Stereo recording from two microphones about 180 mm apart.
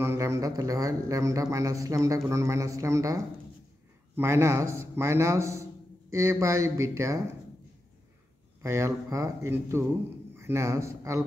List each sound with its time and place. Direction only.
0.0 s speech: 15° right (ahead or behind)
4.2 s speech: 15° right (ahead or behind)
8.6 s speech: 15° right (ahead or behind)